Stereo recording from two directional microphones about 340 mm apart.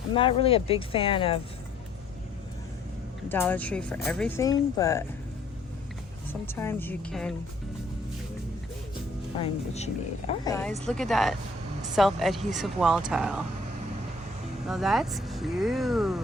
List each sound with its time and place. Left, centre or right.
0.1 s speech: centre
3.2 s speech: centre
6.4 s speech: centre
9.0 s speech: centre
14.7 s speech: centre